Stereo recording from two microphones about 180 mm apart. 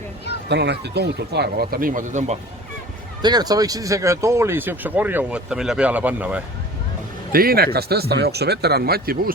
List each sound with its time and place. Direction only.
0.4 s speech: 70° right (ahead or behind); by 2.4 s 40° right (ahead or behind)
3.2 s speech: 20° right (ahead or behind)
7.3 s speech: 55° right (ahead or behind)